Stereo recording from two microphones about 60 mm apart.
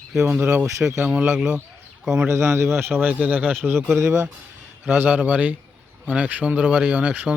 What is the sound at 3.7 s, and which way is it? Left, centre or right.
Speech, right.